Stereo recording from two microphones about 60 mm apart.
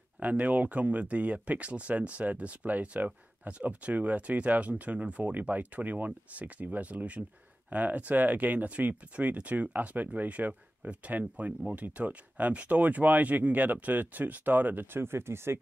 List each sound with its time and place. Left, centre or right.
0.2 s speech: right